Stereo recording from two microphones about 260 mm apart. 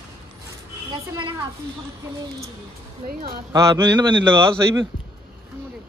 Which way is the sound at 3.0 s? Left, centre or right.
Right.